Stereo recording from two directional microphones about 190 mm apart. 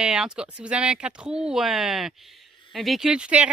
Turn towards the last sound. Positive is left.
turn(degrees=-5)  # may be behind; listen again after turning